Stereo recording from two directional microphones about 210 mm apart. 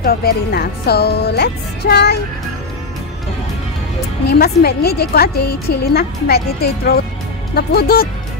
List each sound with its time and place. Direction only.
0.0 s a woman's voice: 45° left (ahead or behind)
4.3 s a woman's voice: 50° left (ahead or behind)